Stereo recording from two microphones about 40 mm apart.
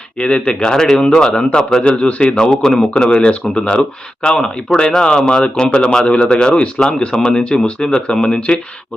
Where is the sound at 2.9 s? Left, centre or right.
Left.